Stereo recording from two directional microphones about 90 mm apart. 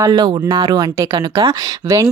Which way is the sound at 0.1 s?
55° right (ahead or behind).